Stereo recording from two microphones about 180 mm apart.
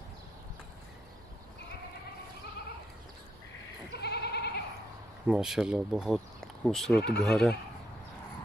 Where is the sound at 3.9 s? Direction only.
65° left (ahead or behind).